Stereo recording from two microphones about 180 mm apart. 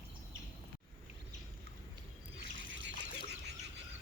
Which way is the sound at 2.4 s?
80° right.